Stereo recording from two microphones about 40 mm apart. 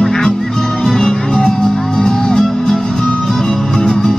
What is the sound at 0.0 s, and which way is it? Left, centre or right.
Music, centre.